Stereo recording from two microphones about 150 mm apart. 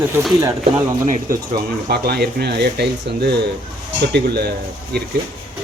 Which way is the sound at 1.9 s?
90° right.